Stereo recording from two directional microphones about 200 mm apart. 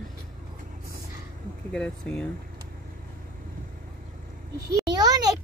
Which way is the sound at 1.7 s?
5° left (ahead or behind).